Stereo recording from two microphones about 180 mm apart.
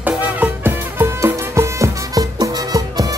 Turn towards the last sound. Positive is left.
turn(degrees=-20)  # may be behind; listen again after turning